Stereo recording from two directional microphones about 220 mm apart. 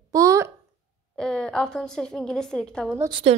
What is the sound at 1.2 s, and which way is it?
A woman's voice, 5° left (ahead or behind).